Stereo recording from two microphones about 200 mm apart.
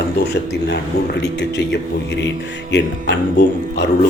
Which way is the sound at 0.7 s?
60° left (ahead or behind).